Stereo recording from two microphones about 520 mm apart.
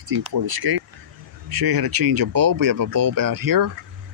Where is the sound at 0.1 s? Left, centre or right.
Right.